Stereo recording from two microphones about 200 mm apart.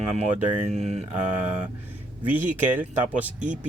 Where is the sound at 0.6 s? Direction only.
35° right (ahead or behind).